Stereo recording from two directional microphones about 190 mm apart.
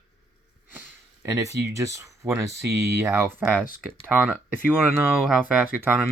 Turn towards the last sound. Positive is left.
turn(degrees=-10)  # may be behind; listen again after turning